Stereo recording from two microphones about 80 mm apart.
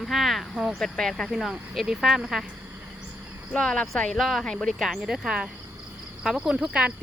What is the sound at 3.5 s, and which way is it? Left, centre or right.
Speech, centre.